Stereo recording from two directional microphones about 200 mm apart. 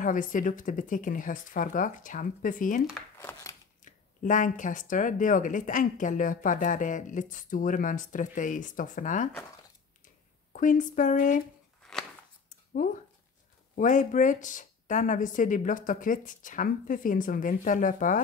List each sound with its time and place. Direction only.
0.0 s speech: 40° left (ahead or behind)
3.2 s a sound: 10° left (ahead or behind)
3.8 s speech: 40° left (ahead or behind)
10.5 s speech: 40° left (ahead or behind)
11.8 s a sound: 5° left (ahead or behind)
13.7 s speech: 40° left (ahead or behind)